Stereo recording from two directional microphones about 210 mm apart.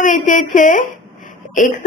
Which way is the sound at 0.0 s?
40° left (ahead or behind).